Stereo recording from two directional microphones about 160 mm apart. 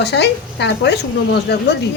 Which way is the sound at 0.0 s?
90° left.